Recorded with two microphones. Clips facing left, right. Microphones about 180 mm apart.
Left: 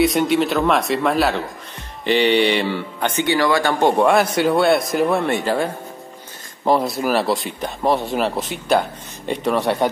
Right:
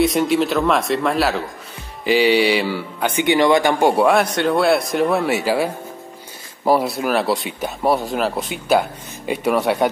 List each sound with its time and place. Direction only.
0.0 s speech: centre (ahead or behind)